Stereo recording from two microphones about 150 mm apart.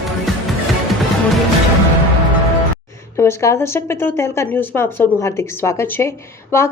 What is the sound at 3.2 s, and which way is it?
A woman's voice, 15° left (ahead or behind).